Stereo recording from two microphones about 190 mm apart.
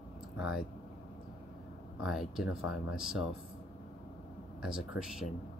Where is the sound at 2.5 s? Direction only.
90° left.